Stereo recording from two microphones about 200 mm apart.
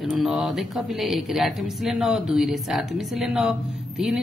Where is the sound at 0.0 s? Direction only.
Centre (ahead or behind).